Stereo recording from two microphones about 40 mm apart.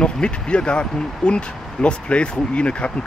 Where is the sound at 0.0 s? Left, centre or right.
Left.